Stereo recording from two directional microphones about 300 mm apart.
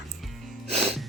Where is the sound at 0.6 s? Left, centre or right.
Right.